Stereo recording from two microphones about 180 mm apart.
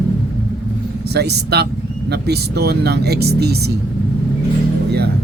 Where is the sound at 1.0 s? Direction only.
65° right (ahead or behind).